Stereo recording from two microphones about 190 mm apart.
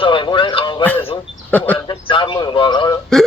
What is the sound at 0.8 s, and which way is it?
Speech, 10° left (ahead or behind).